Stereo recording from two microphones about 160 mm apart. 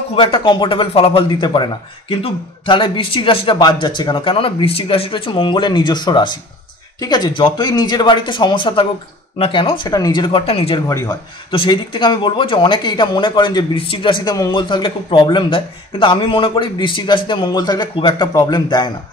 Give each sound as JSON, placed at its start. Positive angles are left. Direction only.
{"t": 0.1, "sound": "speech", "side_deg": 35}
{"t": 10.9, "sound": "speech", "side_deg": 20}
{"t": 11.5, "sound": "speech", "side_deg": 30}